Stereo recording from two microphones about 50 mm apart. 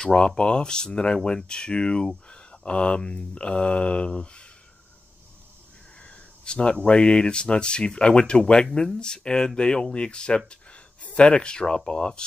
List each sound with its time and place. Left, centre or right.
0.0 s speech: centre
5.9 s speech: left